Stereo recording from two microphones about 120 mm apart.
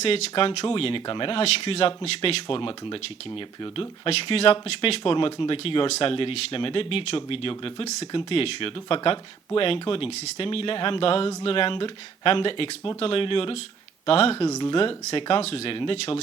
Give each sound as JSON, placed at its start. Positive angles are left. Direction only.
{"t": 0.0, "sound": "speech", "side_deg": 50}
{"t": 14.4, "sound": "speech", "side_deg": 35}